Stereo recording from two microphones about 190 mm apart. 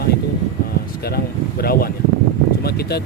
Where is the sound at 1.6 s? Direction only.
55° left (ahead or behind).